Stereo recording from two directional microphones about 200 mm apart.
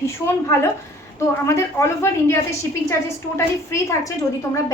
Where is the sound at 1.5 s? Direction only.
15° left (ahead or behind).